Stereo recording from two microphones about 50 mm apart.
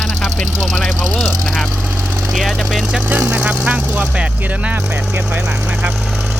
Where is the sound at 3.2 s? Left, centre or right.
Right; by 5.8 s centre.